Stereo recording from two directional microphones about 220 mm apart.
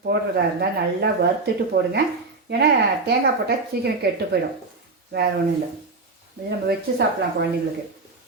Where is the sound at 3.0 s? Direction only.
45° right (ahead or behind).